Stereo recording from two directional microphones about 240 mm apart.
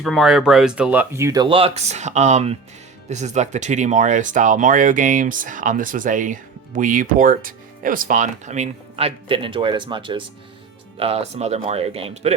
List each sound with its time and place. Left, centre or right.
0.0 s speech: centre; by 12.3 s right